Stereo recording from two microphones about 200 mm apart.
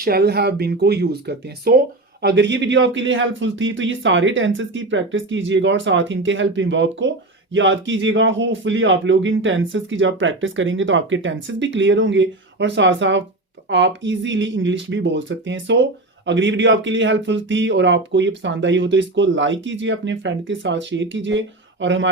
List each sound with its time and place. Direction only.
0.0 s speech: 50° right (ahead or behind); by 22.1 s 70° right (ahead or behind)